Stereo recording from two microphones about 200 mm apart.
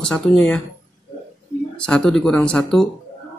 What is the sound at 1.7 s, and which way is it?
Speech, 5° left (ahead or behind).